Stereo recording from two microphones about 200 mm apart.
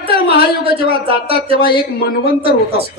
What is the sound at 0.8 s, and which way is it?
Speech, 30° right (ahead or behind).